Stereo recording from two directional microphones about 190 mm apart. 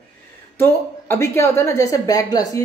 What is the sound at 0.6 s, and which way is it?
A woman's voice, 10° left (ahead or behind).